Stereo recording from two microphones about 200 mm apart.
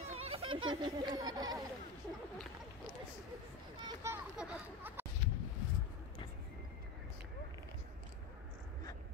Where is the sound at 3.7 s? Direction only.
20° right (ahead or behind).